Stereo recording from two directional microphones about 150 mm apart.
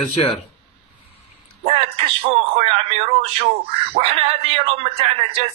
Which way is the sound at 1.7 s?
40° right (ahead or behind).